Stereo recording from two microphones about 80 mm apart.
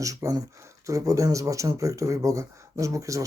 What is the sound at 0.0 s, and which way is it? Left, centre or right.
Speech, right.